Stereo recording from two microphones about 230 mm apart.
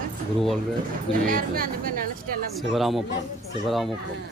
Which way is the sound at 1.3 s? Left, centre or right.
Right.